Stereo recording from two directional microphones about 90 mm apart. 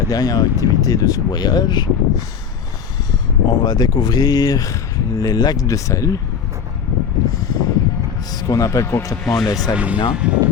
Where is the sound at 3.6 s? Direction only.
50° left (ahead or behind).